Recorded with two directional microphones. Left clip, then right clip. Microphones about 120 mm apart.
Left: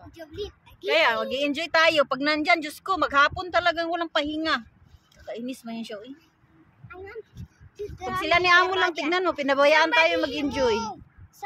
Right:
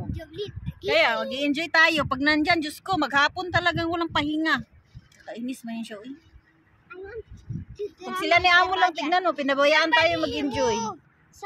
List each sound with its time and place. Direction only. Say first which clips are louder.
0.1 s a woman's voice: left 1 dB; 10° left (ahead or behind)
7.7 s a woman's voice: left 1 dB; 15° left (ahead or behind)